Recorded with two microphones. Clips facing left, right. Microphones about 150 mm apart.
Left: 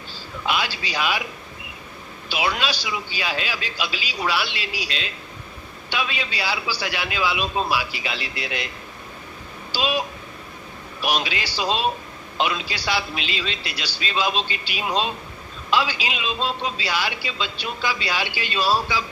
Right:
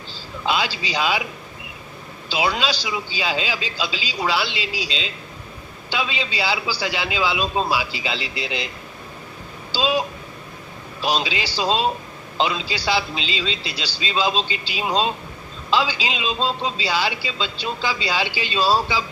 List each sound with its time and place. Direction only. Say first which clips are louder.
0.4 s speech: right 2 dB; 25° right (ahead or behind)
2.3 s speech: right 2 dB; 25° right (ahead or behind)
9.7 s speech: right 3 dB; 25° right (ahead or behind)
11.0 s speech: right 2 dB; 25° right (ahead or behind)